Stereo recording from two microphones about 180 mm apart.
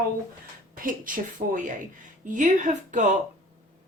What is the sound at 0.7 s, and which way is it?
Speech, 50° right (ahead or behind).